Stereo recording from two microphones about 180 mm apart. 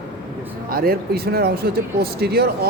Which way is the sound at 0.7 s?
55° right (ahead or behind).